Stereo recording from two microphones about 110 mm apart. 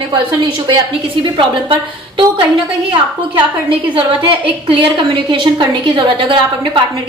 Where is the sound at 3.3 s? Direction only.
50° right (ahead or behind).